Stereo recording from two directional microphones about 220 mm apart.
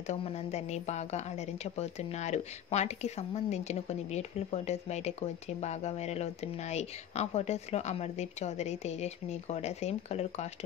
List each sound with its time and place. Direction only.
0.0 s a woman's voice: 30° left (ahead or behind)